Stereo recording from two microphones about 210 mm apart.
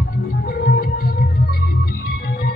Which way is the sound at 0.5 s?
45° left (ahead or behind).